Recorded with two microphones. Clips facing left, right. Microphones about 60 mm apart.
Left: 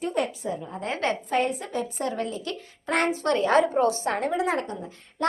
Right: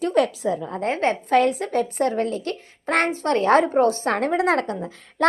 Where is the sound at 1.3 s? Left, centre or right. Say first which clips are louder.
Right 7 dB; right.